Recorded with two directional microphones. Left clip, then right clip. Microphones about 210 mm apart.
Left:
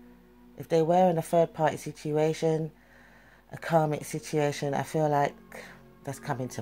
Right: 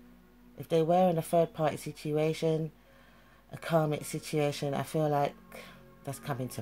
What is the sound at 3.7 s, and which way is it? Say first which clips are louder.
Speech: left 4 dB; centre (ahead or behind).